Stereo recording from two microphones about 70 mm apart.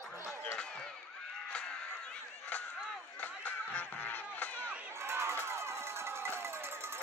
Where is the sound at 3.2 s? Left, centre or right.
Left.